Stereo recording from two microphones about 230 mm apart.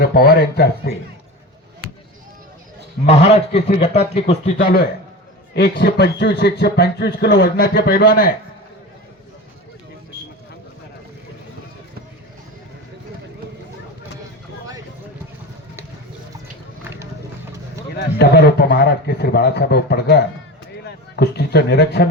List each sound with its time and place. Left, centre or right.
0.0 s speech: left
3.2 s speech: left
17.9 s speech: left